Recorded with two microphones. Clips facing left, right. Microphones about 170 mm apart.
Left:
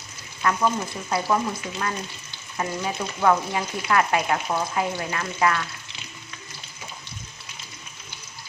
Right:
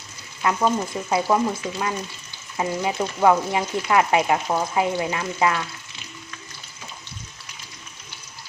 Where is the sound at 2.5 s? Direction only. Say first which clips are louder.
Right 4 dB; 20° right (ahead or behind).